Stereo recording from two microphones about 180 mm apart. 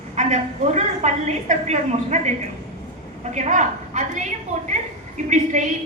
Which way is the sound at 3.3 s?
40° right (ahead or behind).